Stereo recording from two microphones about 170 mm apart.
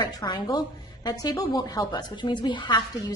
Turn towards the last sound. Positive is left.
turn(degrees=25)  # may be behind; listen again after turning